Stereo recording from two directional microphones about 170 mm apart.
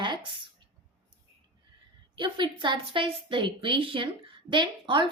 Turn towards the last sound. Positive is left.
turn(degrees=-30)  # may be behind; listen again after turning